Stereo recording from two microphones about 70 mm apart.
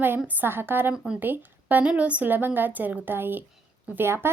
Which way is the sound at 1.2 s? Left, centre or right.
Right.